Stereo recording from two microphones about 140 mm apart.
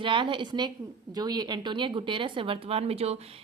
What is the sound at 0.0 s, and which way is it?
A woman's voice, 35° right (ahead or behind).